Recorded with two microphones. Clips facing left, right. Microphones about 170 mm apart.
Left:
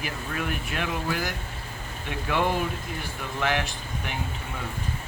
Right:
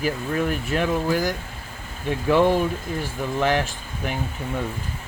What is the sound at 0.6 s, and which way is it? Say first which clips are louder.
Speech: right 7 dB; 40° right (ahead or behind).